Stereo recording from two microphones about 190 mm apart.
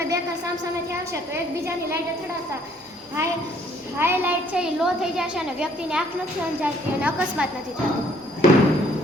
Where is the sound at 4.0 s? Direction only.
10° right (ahead or behind).